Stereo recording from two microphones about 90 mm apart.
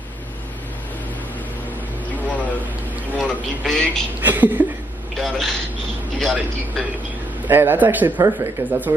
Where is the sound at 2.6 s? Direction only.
20° right (ahead or behind).